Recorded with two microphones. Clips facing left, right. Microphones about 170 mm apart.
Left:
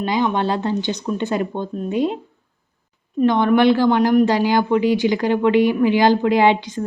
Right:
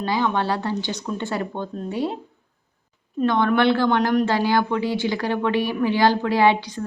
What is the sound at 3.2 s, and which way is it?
A woman's voice, 15° left (ahead or behind).